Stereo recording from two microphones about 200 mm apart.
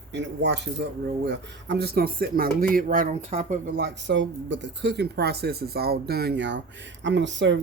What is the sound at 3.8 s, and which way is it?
Speech, 60° right (ahead or behind).